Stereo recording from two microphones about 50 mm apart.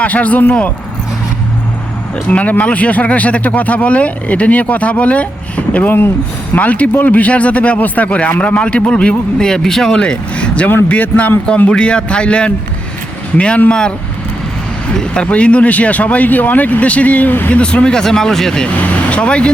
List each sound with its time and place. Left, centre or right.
0.0 s speech: left
2.3 s speech: left; by 10.0 s centre
10.0 s speech: left
14.9 s speech: centre; by 17.5 s left
17.5 s speech: left
19.1 s speech: left